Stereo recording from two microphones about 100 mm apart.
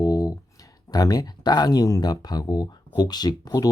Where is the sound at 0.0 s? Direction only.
40° left (ahead or behind).